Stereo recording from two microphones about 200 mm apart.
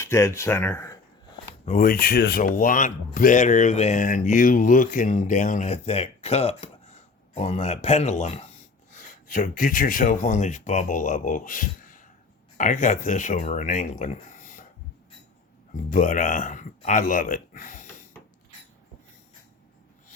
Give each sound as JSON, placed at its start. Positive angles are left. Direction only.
{"t": 0.0, "sound": "speech", "side_deg": 15}
{"t": 1.6, "sound": "speech", "side_deg": 40}
{"t": 15.7, "sound": "speech", "side_deg": 40}